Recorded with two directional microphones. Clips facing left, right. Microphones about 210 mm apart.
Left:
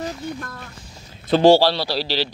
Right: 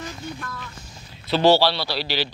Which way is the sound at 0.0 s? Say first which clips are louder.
Left 5 dB; 40° left (ahead or behind).